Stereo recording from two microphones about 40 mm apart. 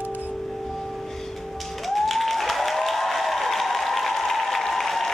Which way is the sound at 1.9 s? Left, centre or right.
Centre.